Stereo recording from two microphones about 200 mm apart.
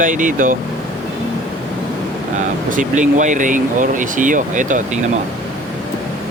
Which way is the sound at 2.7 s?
40° right (ahead or behind).